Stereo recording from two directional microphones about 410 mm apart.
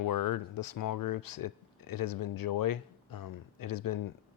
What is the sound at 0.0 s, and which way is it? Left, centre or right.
Speech, left.